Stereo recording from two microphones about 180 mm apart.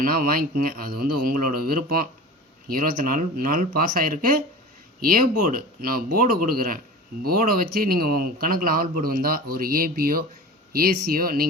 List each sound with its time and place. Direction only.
0.0 s speech: 55° right (ahead or behind)